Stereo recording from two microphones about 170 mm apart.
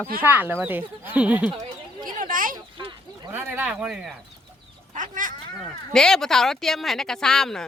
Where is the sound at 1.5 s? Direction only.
25° right (ahead or behind).